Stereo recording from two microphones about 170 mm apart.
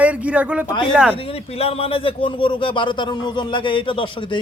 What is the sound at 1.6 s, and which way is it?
A man's voice, 35° left (ahead or behind).